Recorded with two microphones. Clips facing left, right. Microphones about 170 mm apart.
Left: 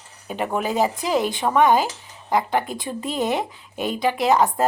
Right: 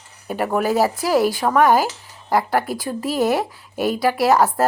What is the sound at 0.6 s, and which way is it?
Speech, 15° left (ahead or behind).